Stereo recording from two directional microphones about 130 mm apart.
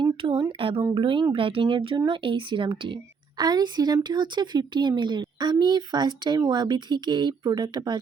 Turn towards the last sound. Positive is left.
turn(degrees=-30)  # may be behind; listen again after turning